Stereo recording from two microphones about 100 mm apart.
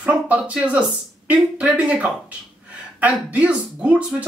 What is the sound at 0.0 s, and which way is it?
Speech, 15° right (ahead or behind).